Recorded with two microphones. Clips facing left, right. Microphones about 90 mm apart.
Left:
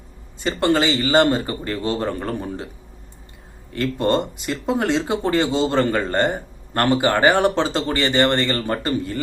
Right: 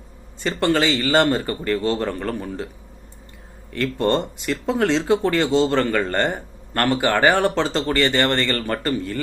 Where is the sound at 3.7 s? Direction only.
15° left (ahead or behind).